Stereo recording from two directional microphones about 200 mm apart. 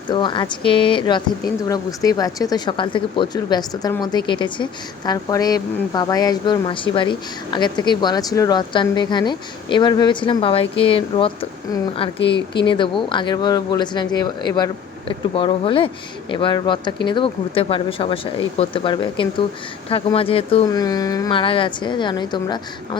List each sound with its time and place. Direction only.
0.1 s a woman's voice: 25° left (ahead or behind)
20.7 s a woman's voice: 20° left (ahead or behind)